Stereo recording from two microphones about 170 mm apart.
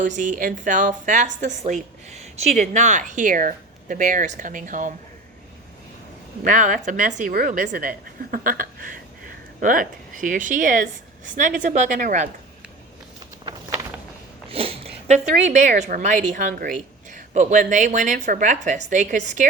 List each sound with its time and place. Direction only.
0.0 s speech: 50° right (ahead or behind)
6.4 s speech: 50° right (ahead or behind)
14.5 s speech: 35° right (ahead or behind)